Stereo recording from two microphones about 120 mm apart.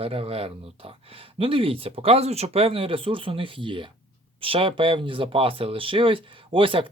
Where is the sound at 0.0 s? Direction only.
55° right (ahead or behind).